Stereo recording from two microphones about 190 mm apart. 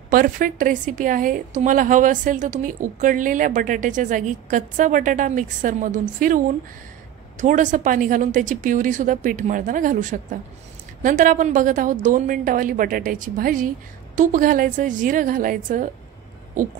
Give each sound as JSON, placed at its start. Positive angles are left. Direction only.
{"t": 0.1, "sound": "a woman's voice", "side_deg": -50}